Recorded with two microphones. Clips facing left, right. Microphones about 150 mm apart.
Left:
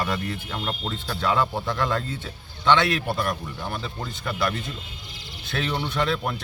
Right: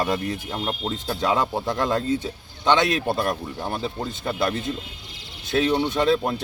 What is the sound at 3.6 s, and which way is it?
Speech, 35° right (ahead or behind).